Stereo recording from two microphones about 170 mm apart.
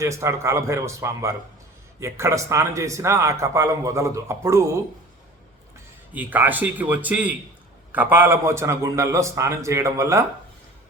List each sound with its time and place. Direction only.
0.0 s speech: 15° right (ahead or behind)
5.7 s a man's voice: 10° right (ahead or behind)